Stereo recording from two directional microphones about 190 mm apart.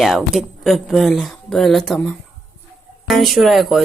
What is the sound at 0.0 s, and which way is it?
Speech, centre (ahead or behind).